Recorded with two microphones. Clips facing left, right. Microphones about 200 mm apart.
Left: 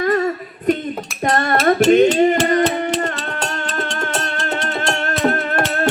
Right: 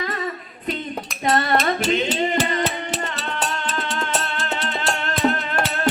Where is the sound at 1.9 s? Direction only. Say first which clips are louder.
Left 13 dB; 50° left (ahead or behind).